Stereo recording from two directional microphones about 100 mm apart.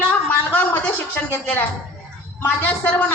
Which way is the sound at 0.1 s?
20° left (ahead or behind).